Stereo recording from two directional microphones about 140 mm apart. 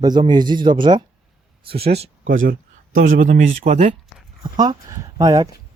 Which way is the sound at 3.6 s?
55° right (ahead or behind).